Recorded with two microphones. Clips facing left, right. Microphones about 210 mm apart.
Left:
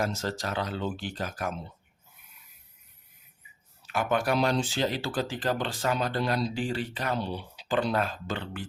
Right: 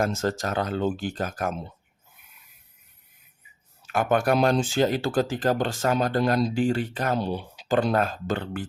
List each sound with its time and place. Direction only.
0.0 s speech: 50° right (ahead or behind)
3.8 s speech: 50° right (ahead or behind)